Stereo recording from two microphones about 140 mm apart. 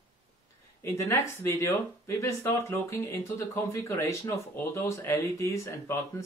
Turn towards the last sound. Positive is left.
turn(degrees=20)  # may be behind; listen again after turning